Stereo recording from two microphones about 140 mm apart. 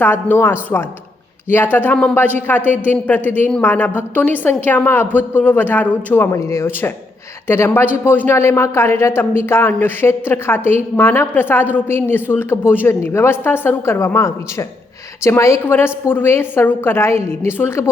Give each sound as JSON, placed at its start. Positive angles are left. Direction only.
{"t": 0.0, "sound": "speech", "side_deg": 15}